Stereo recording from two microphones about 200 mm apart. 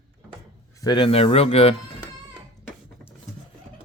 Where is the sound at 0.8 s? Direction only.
25° left (ahead or behind).